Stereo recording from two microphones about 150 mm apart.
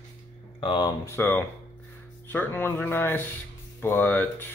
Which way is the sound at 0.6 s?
30° left (ahead or behind).